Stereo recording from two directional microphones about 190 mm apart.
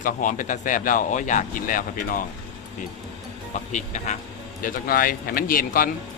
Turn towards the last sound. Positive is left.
turn(degrees=50)  # may be behind; listen again after turning